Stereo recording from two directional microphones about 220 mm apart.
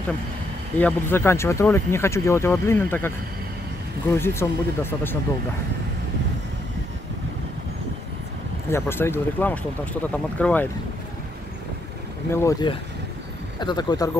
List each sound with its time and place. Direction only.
0.7 s speech: 10° left (ahead or behind)
4.1 s speech: 10° left (ahead or behind)
8.6 s speech: 10° left (ahead or behind)
12.3 s speech: 15° left (ahead or behind)